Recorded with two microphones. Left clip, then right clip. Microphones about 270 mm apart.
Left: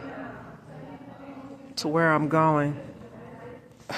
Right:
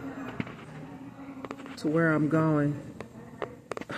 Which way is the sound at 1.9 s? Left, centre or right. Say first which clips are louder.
Left 4 dB; left.